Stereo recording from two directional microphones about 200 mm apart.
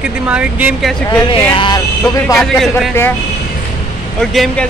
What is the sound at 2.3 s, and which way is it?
Speech, centre (ahead or behind).